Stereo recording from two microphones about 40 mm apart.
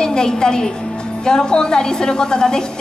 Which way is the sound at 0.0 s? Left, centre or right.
Centre.